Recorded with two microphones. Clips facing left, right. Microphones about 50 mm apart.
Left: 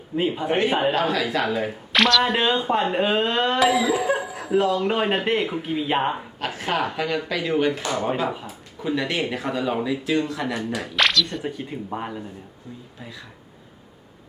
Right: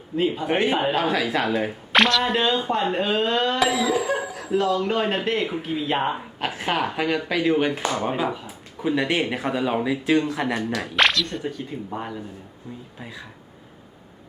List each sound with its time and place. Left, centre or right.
0.2 s speech: centre
0.4 s speech: centre
2.2 s speech: centre
6.4 s speech: centre
9.0 s speech: centre
10.9 s speech: centre
11.4 s speech: centre
13.0 s speech: centre